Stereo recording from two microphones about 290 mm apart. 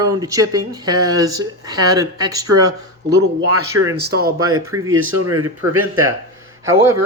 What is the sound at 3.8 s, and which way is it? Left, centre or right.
Speech, right.